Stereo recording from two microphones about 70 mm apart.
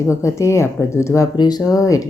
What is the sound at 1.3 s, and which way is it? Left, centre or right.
Speech, left.